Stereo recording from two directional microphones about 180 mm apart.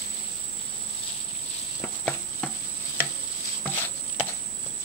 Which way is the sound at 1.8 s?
5° left (ahead or behind).